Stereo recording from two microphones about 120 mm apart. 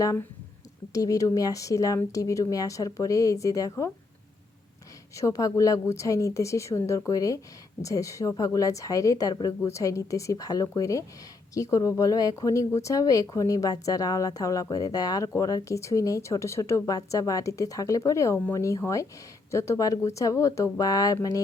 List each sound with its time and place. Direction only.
0.0 s speech: 30° left (ahead or behind)
5.1 s speech: 25° left (ahead or behind)